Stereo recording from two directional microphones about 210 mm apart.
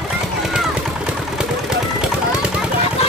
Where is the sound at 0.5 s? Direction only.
5° right (ahead or behind).